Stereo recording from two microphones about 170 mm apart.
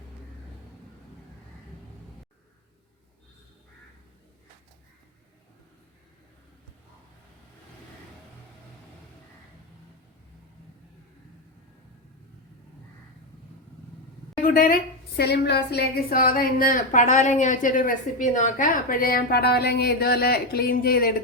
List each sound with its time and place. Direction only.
14.5 s a woman's voice: 55° left (ahead or behind)